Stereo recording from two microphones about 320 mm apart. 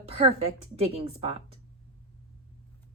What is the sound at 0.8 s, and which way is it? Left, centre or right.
Speech, centre.